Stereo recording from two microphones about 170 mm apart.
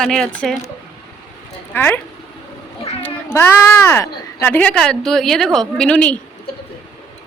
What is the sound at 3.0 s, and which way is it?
A woman's voice, 15° left (ahead or behind).